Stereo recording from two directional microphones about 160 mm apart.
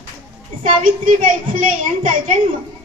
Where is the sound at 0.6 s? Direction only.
55° right (ahead or behind).